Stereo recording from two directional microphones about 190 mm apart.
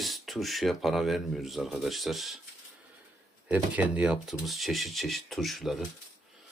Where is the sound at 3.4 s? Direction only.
5° right (ahead or behind).